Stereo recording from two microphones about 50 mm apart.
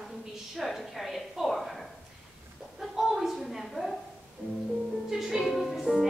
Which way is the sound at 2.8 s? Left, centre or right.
Centre.